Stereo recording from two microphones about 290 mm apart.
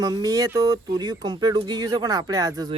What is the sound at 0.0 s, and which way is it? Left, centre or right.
Speech, centre.